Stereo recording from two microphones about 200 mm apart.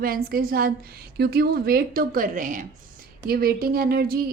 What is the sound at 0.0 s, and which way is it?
Speech, 45° right (ahead or behind).